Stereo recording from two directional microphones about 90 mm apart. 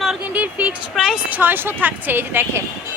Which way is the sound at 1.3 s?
20° right (ahead or behind).